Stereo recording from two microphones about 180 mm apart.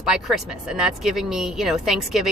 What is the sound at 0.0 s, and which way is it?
Speech, centre (ahead or behind).